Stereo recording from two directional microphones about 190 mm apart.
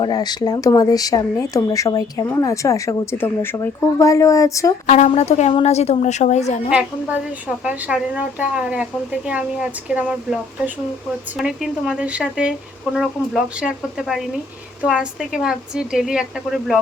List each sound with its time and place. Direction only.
0.0 s speech: 20° left (ahead or behind)
4.9 s speech: 40° left (ahead or behind)
6.7 s speech: 5° right (ahead or behind)
11.3 s speech: centre (ahead or behind)